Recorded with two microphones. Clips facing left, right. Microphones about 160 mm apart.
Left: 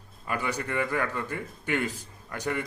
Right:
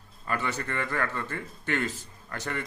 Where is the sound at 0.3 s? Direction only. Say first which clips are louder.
Left 1 dB; 15° left (ahead or behind).